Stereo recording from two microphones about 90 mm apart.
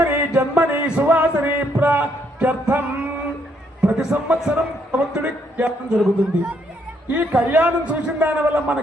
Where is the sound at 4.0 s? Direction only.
10° right (ahead or behind).